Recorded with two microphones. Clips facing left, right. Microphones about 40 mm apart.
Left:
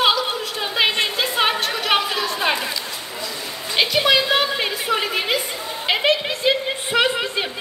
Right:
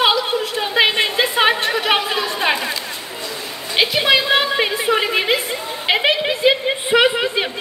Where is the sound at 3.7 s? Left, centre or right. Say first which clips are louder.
Right 2 dB; centre.